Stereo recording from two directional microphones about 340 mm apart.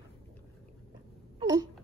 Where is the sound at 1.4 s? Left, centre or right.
Centre.